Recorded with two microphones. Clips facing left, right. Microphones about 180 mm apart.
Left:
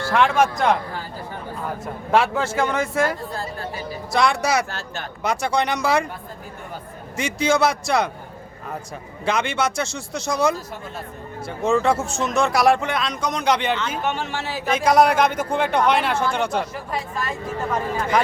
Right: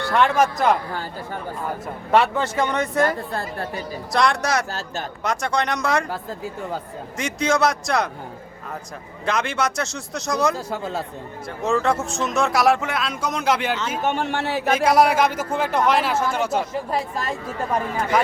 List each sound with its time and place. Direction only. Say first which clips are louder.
0.0 s speech: even; centre (ahead or behind)
2.1 s speech: right 1 dB; centre (ahead or behind)
7.2 s speech: left 1 dB; centre (ahead or behind)
9.2 s speech: left 1 dB; centre (ahead or behind)
10.7 s a man's voice: right 7 dB; 80° right
11.4 s speech: left 2 dB; centre (ahead or behind)
14.0 s speech: right 3 dB; 55° right (ahead or behind)
14.8 s speech: left 2 dB; 5° right (ahead or behind)